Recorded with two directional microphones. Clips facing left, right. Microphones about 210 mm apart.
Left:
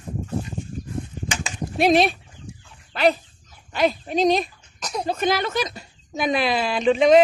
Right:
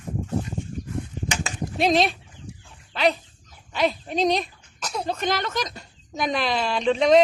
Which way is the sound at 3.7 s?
5° left (ahead or behind).